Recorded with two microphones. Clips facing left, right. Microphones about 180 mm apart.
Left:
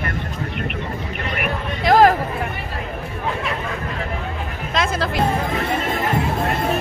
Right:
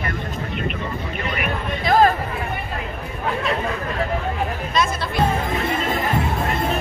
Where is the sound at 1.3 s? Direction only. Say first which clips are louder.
Left 2 dB; 80° left.